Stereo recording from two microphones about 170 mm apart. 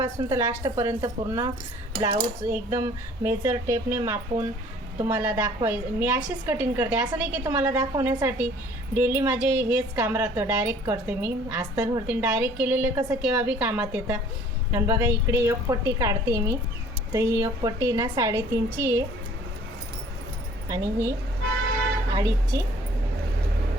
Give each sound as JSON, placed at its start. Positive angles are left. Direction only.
{"t": 0.2, "sound": "a woman's voice", "side_deg": -20}
{"t": 20.7, "sound": "speech", "side_deg": -20}